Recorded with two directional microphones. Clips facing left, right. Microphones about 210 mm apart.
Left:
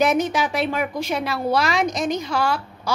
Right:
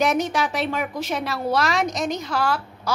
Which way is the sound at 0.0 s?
Centre (ahead or behind).